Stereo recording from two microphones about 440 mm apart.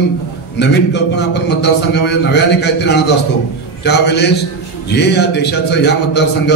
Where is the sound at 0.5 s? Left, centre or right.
Left.